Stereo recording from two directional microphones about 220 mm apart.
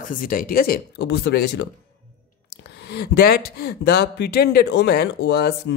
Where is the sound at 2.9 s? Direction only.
45° left (ahead or behind).